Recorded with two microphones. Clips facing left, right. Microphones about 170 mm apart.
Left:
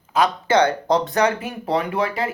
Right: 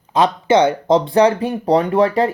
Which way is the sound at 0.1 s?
25° right (ahead or behind).